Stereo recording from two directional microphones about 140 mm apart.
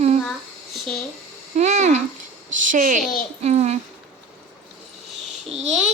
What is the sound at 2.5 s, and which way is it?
A woman's voice, 65° right (ahead or behind).